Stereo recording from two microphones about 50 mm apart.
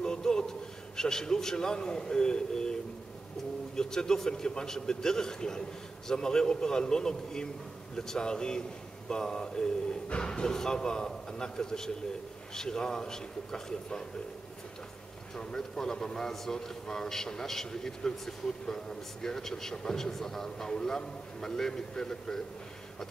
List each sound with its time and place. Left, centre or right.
0.0 s a man's voice: centre
15.3 s a man's voice: centre